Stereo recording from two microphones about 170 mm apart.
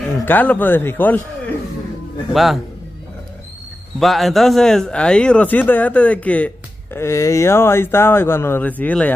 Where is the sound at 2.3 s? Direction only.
Centre (ahead or behind).